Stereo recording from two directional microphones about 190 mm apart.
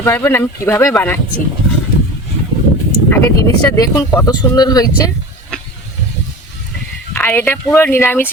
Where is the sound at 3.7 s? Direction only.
15° left (ahead or behind).